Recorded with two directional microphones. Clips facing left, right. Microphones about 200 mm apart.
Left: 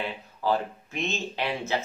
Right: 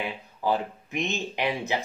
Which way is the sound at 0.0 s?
15° right (ahead or behind).